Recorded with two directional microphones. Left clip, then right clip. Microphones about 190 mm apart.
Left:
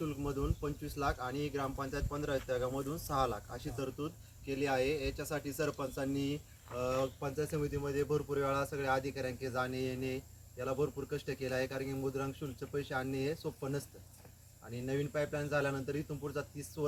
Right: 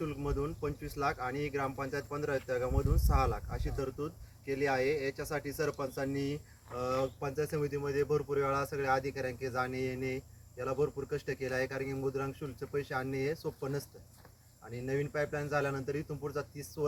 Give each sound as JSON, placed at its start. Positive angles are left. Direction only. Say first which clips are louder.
{"t": 0.0, "sound": "speech", "louder": "right 2 dB", "side_deg": -15}
{"t": 14.8, "sound": "speech", "louder": "right 2 dB", "side_deg": -20}